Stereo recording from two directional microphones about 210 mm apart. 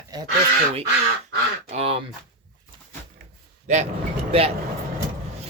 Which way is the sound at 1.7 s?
30° right (ahead or behind).